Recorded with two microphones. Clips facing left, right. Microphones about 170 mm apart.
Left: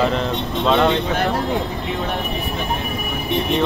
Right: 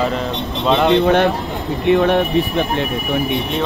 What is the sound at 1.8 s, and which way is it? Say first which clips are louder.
Speech: right 11 dB; 70° right (ahead or behind).